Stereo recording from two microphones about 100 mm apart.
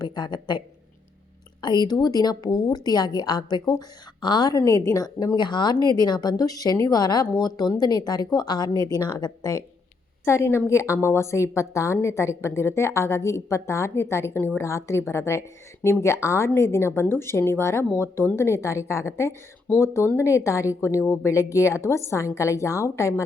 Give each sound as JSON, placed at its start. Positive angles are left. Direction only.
{"t": 0.0, "sound": "speech", "side_deg": 50}
{"t": 1.6, "sound": "a woman's voice", "side_deg": 50}
{"t": 10.2, "sound": "a woman's voice", "side_deg": 25}